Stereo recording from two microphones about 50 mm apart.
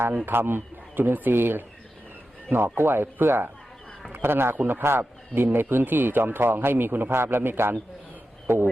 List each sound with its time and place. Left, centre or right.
0.3 s speech: right
2.7 s speech: right